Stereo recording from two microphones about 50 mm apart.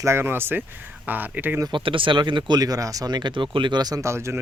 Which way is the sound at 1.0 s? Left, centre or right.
Right.